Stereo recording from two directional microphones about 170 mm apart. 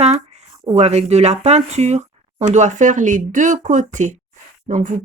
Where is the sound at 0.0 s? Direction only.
40° right (ahead or behind).